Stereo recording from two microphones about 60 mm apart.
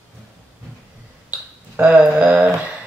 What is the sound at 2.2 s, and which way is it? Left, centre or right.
Speech, right.